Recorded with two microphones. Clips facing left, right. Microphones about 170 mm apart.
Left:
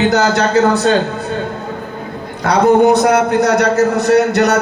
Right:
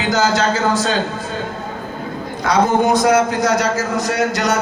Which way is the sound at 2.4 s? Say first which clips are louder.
Left 5 dB; 65° left (ahead or behind).